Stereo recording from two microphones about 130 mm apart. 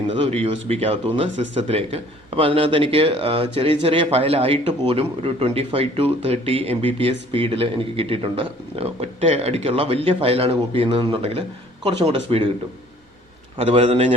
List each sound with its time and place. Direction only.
0.3 s speech: 55° right (ahead or behind)
13.6 s speech: 50° right (ahead or behind)